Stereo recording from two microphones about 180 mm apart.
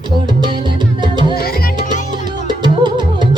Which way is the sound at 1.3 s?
60° left (ahead or behind).